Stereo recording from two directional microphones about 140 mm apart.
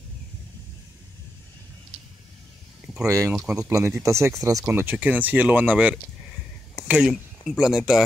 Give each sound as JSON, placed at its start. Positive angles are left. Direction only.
{"t": 3.1, "sound": "speech", "side_deg": -25}